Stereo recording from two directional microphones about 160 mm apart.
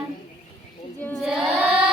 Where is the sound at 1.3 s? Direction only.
5° right (ahead or behind).